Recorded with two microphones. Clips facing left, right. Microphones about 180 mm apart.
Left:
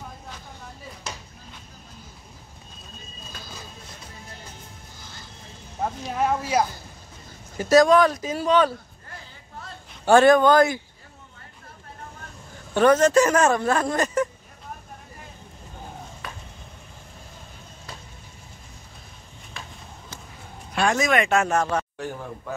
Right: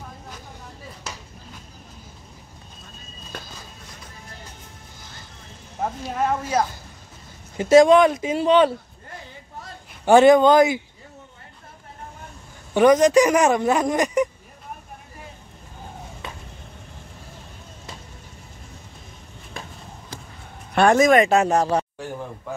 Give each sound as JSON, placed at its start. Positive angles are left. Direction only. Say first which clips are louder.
{"t": 6.0, "sound": "speech", "louder": "even", "side_deg": 5}
{"t": 7.5, "sound": "speech", "louder": "right 3 dB", "side_deg": -25}
{"t": 10.0, "sound": "speech", "louder": "right 2 dB", "side_deg": -20}
{"t": 12.7, "sound": "speech", "louder": "right 2 dB", "side_deg": -15}
{"t": 20.7, "sound": "speech", "louder": "right 7 dB", "side_deg": -55}